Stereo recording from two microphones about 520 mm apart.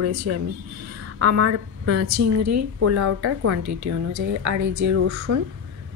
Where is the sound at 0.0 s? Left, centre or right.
Right.